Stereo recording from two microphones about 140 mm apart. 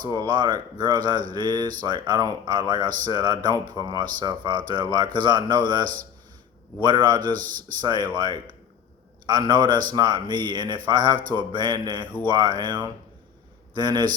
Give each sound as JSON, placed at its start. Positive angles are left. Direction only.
{"t": 0.0, "sound": "speech", "side_deg": -30}
{"t": 7.3, "sound": "speech", "side_deg": -80}
{"t": 7.8, "sound": "speech", "side_deg": -30}